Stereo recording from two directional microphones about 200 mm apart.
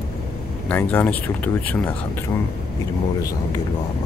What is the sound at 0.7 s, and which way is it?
Speech, 10° left (ahead or behind).